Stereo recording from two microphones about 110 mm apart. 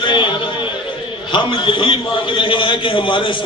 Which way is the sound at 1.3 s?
50° left (ahead or behind).